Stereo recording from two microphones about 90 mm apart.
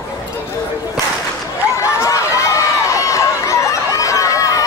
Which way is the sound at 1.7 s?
35° left (ahead or behind).